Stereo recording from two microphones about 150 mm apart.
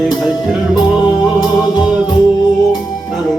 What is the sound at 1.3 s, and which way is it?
Music, 30° left (ahead or behind).